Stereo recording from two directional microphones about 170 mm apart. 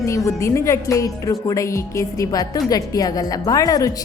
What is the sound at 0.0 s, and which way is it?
A woman's voice, 20° left (ahead or behind).